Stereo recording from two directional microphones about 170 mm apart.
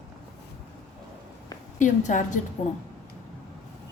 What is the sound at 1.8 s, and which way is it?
Speech, 45° left (ahead or behind).